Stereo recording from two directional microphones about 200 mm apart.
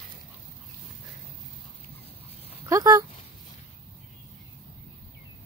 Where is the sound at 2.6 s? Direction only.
15° right (ahead or behind).